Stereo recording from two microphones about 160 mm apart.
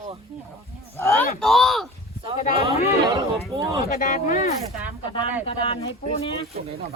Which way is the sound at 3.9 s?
65° left (ahead or behind).